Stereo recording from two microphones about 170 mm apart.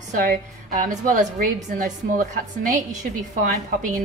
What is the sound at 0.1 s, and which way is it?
A woman's voice, 55° right (ahead or behind).